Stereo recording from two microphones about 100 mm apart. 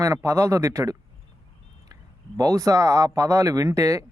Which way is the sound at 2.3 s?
35° right (ahead or behind).